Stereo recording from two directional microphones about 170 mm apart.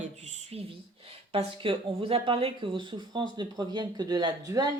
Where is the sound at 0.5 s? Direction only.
35° right (ahead or behind).